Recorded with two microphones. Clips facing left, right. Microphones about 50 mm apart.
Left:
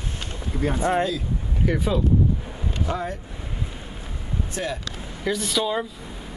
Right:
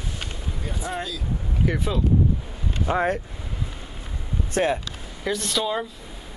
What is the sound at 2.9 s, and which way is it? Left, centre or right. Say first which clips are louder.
Speech: right 5 dB; right.